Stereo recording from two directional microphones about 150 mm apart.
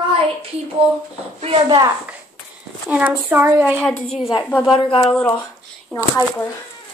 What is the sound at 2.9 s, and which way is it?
Speech, 10° right (ahead or behind).